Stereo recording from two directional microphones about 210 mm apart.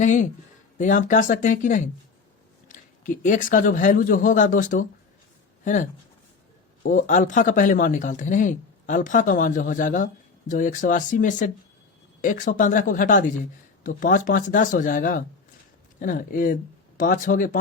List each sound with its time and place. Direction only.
0.0 s speech: 35° left (ahead or behind)